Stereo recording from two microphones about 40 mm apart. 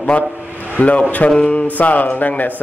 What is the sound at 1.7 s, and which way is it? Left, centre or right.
Speech, left.